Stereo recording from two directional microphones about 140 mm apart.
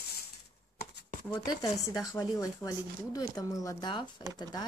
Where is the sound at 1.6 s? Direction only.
25° left (ahead or behind).